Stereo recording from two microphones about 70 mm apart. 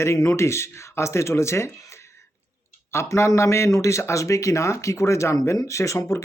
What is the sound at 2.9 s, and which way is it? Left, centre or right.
Speech, left.